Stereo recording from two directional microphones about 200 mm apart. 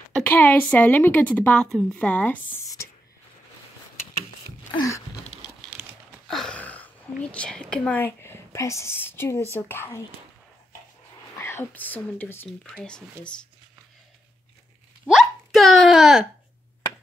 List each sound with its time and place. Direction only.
0.1 s speech: 10° left (ahead or behind)
2.6 s beatboxing: 15° left (ahead or behind)
4.7 s a sound: 15° left (ahead or behind)
5.7 s a sound: centre (ahead or behind)
11.3 s speech: 10° left (ahead or behind)
15.0 s hiccup: centre (ahead or behind)